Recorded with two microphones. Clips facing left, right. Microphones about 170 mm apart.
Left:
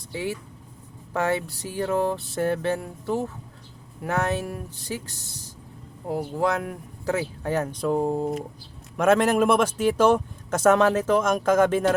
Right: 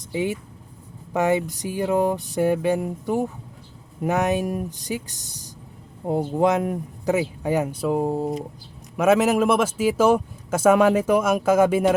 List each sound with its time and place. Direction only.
0.1 s a man's voice: 20° right (ahead or behind)